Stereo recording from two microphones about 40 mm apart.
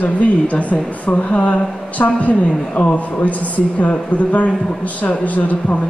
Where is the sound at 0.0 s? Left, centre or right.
Left.